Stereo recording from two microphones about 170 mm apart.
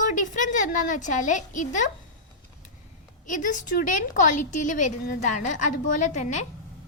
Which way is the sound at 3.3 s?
50° left (ahead or behind).